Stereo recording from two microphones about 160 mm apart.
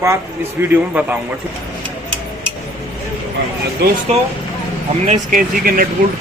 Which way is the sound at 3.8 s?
80° right.